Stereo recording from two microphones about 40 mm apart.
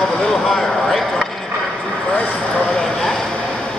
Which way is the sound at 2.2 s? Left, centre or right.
Left.